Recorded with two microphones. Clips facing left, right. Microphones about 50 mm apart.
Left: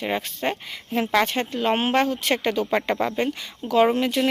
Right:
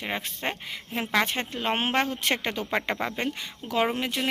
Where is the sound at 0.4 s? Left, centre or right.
Centre.